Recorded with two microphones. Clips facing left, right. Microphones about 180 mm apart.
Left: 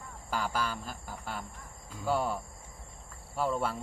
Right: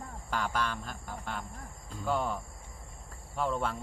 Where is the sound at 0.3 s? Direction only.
5° left (ahead or behind).